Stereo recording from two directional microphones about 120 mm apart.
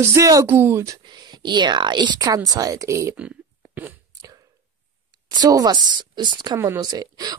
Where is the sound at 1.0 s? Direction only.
35° right (ahead or behind).